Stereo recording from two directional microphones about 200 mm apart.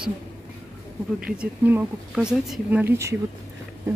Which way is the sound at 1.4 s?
5° right (ahead or behind).